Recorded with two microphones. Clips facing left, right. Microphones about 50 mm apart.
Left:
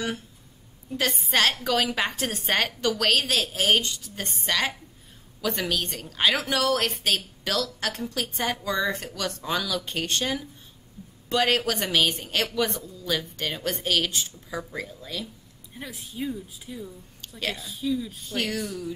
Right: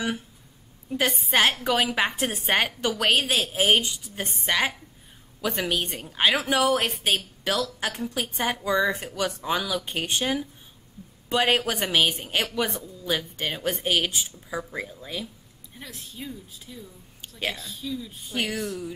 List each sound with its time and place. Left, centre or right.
1.3 s a woman's voice: right
15.8 s a woman's voice: centre
18.3 s a woman's voice: centre